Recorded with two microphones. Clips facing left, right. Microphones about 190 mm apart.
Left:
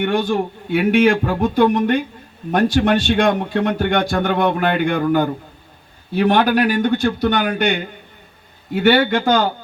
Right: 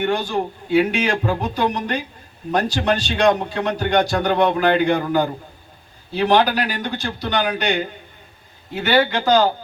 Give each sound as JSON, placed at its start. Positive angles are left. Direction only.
{"t": 0.0, "sound": "a man's voice", "side_deg": 55}
{"t": 6.1, "sound": "a man's voice", "side_deg": 55}